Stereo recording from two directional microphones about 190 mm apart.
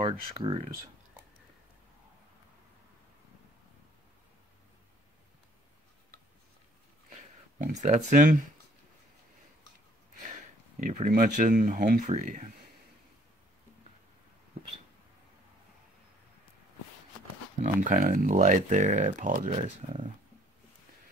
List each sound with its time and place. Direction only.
0.0 s speech: 30° right (ahead or behind)
7.1 s a sound: 40° right (ahead or behind)
10.8 s speech: 40° right (ahead or behind)
17.6 s speech: 40° right (ahead or behind)